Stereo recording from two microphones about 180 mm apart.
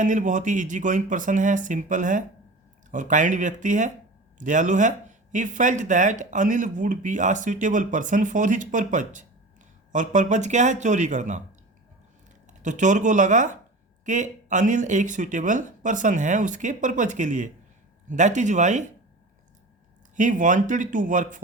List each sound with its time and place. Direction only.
0.0 s speech: 45° right (ahead or behind)
12.5 s speech: 45° right (ahead or behind)
20.1 s speech: 45° right (ahead or behind)